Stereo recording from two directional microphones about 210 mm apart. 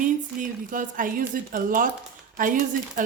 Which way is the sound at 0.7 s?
40° right (ahead or behind).